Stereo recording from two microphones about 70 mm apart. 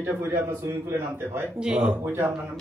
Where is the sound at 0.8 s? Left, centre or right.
Right.